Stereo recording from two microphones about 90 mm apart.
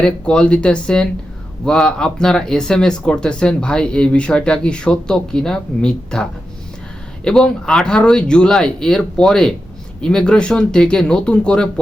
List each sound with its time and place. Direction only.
0.0 s speech: 10° left (ahead or behind)
7.3 s speech: 10° left (ahead or behind)